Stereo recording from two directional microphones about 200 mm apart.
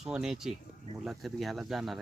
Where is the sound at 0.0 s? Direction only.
5° right (ahead or behind).